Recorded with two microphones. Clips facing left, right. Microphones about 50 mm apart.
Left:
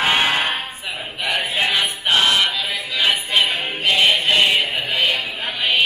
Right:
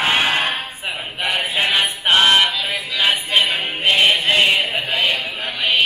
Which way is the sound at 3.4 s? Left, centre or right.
Centre.